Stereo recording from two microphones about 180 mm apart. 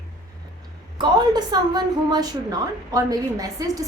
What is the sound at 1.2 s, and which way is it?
A woman's voice, 20° right (ahead or behind).